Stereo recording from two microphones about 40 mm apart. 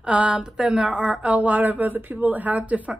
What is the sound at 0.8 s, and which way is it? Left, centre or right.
A woman's voice, right.